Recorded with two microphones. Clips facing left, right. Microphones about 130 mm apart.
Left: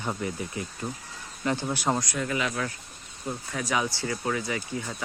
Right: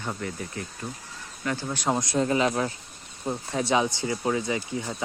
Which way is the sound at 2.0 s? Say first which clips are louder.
Right 6 dB; 30° right (ahead or behind).